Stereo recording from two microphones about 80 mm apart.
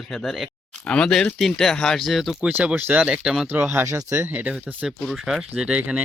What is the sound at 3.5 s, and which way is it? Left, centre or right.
Speech, right.